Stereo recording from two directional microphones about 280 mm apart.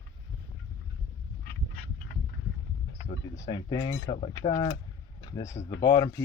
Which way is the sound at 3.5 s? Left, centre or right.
Centre.